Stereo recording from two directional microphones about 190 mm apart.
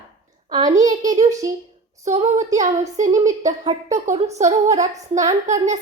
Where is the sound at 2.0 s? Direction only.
35° right (ahead or behind).